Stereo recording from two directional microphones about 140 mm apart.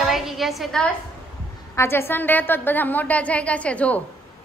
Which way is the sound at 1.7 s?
15° left (ahead or behind).